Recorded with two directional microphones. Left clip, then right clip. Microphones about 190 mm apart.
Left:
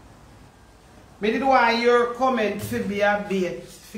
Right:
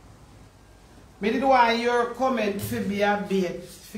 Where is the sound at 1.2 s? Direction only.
20° right (ahead or behind).